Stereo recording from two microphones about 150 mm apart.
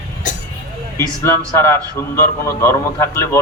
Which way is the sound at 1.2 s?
20° left (ahead or behind).